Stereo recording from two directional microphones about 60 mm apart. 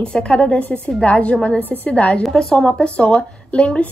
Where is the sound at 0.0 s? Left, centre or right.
Centre.